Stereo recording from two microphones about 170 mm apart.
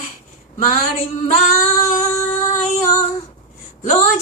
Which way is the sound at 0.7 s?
40° left (ahead or behind).